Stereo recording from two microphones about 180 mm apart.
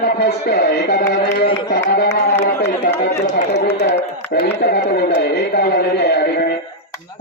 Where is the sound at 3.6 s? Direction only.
70° left (ahead or behind).